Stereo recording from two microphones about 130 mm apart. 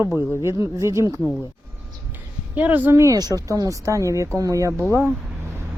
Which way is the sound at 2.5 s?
15° right (ahead or behind).